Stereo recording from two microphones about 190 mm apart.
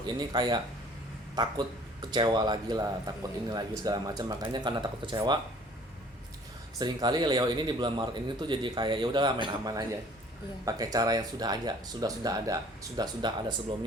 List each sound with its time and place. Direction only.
0.0 s speech: 20° right (ahead or behind)
6.7 s speech: 20° right (ahead or behind)